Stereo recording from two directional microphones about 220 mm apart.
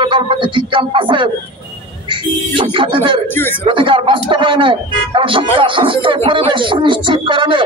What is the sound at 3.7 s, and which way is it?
A man's voice, 20° right (ahead or behind).